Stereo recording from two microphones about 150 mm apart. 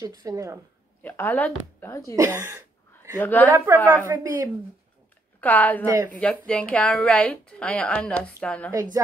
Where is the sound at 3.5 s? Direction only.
15° right (ahead or behind).